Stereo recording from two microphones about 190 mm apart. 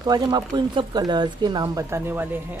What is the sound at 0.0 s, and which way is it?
Speech, 20° right (ahead or behind).